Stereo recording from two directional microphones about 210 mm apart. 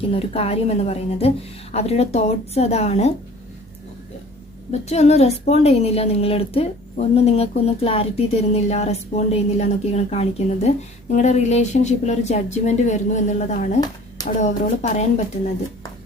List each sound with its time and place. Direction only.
0.1 s a woman's voice: 30° left (ahead or behind)
4.7 s a woman's voice: 30° left (ahead or behind)